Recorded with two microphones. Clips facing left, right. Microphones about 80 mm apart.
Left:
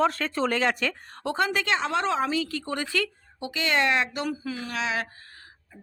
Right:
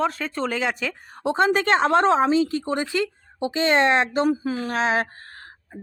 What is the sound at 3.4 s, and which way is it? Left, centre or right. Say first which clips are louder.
Speech: right 6 dB; right.